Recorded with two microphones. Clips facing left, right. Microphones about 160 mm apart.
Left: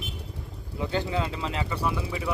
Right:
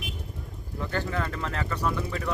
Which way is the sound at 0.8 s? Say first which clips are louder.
Left 2 dB; 15° left (ahead or behind).